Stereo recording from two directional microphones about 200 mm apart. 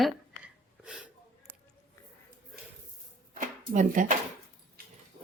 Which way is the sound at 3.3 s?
40° right (ahead or behind).